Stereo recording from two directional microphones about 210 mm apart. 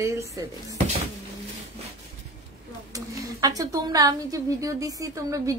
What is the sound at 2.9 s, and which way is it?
A woman's voice, 15° right (ahead or behind).